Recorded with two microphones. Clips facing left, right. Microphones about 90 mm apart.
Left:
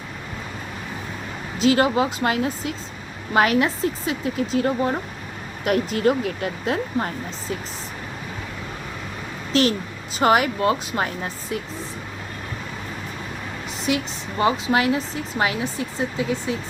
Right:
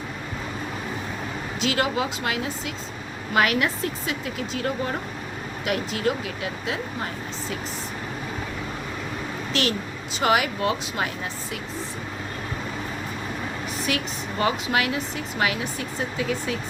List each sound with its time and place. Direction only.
1.5 s speech: 40° left (ahead or behind)
5.6 s speech: 40° left (ahead or behind)
9.5 s speech: 35° left (ahead or behind)
13.8 s a woman's voice: 25° left (ahead or behind)